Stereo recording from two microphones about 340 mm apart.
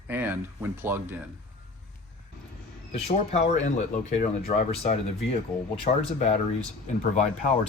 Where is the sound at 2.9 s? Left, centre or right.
Centre.